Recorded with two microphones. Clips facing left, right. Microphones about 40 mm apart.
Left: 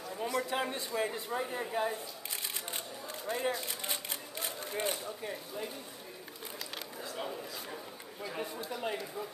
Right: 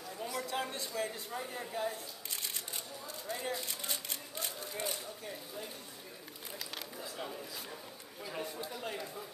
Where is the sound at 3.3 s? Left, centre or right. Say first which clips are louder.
Left 5 dB; left.